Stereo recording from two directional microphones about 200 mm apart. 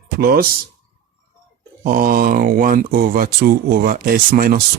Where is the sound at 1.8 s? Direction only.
45° right (ahead or behind).